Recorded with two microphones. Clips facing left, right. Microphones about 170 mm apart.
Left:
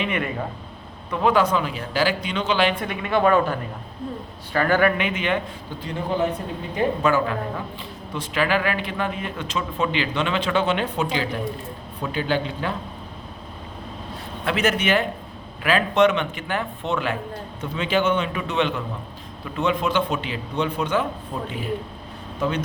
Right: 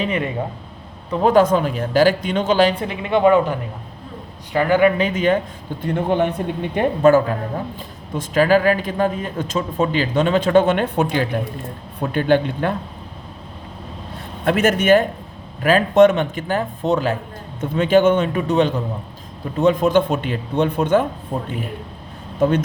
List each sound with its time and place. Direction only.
0.0 s a man's voice: 30° right (ahead or behind)
1.1 s a man's voice: 45° right (ahead or behind); by 4.9 s 15° right (ahead or behind)
4.9 s a man's voice: 40° right (ahead or behind)
5.8 s a man's voice: 60° right (ahead or behind)
6.7 s a man's voice: 45° right (ahead or behind)
14.4 s a man's voice: 50° right (ahead or behind)